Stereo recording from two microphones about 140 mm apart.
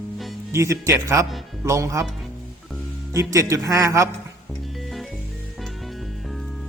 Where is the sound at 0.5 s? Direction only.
20° right (ahead or behind).